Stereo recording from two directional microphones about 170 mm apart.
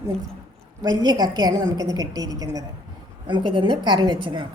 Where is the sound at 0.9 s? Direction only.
20° right (ahead or behind).